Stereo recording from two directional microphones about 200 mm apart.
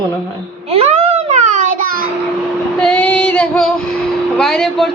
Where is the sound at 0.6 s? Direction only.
30° right (ahead or behind).